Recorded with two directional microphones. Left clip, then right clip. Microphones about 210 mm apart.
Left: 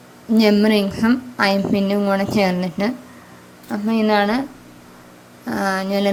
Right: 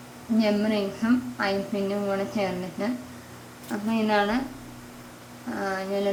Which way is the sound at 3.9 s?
40° left (ahead or behind).